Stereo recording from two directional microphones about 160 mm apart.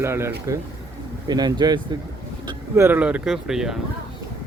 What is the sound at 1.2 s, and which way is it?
Speech, 25° right (ahead or behind).